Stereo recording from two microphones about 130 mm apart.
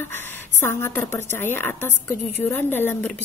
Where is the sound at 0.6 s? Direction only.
15° left (ahead or behind).